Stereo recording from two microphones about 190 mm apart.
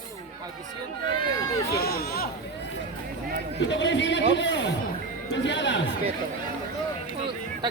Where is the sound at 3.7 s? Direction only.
75° left (ahead or behind).